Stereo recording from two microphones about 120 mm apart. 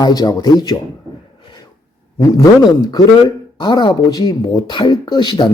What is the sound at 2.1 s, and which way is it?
Speech, 25° left (ahead or behind).